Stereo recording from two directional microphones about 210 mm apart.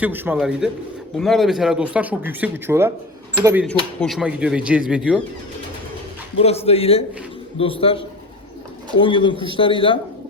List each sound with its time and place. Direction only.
0.0 s a man's voice: 10° right (ahead or behind)
3.7 s speech: centre (ahead or behind)
6.7 s speech: 25° left (ahead or behind)